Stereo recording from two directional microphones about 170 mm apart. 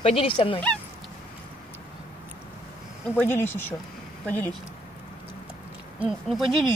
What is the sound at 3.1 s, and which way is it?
Speech, 15° left (ahead or behind).